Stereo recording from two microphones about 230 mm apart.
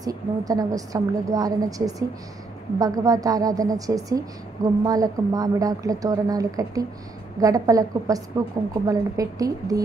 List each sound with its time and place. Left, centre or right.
0.0 s a woman's voice: centre